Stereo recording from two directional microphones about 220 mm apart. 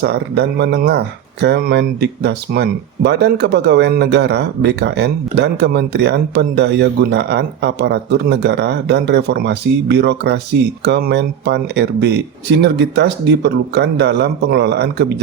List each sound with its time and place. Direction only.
0.0 s speech: 50° right (ahead or behind)